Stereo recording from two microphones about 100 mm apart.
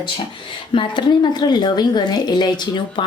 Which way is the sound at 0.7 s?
55° left (ahead or behind).